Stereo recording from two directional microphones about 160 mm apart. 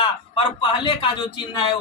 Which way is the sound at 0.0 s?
30° left (ahead or behind).